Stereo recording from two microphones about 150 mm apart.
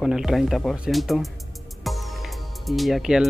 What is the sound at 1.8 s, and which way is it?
Music, centre (ahead or behind).